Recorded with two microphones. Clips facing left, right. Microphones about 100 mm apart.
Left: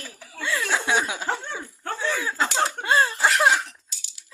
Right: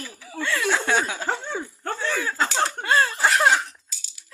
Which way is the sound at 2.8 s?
20° left (ahead or behind).